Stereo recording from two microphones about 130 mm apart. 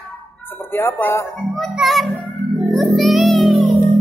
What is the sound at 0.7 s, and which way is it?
Speech, 15° left (ahead or behind).